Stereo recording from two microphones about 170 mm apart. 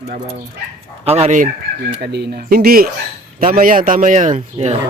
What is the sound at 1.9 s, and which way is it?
Speech, 70° right (ahead or behind).